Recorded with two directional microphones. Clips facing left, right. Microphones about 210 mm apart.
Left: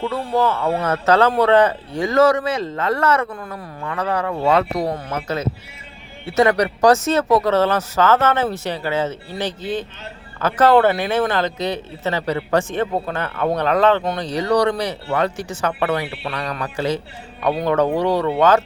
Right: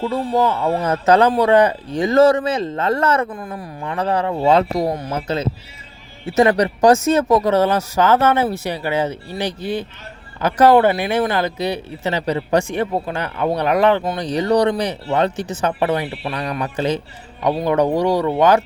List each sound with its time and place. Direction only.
0.0 s speech: 15° right (ahead or behind)
3.2 s speech: 35° right (ahead or behind); by 14.2 s 10° right (ahead or behind)
14.2 s speech: 20° right (ahead or behind)